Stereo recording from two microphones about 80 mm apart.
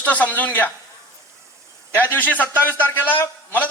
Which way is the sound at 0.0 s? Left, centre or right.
Centre.